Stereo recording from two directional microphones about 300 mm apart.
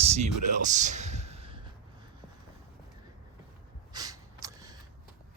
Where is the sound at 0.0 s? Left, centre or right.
Right.